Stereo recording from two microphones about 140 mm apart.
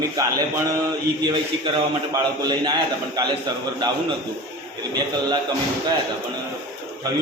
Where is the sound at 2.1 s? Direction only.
30° right (ahead or behind).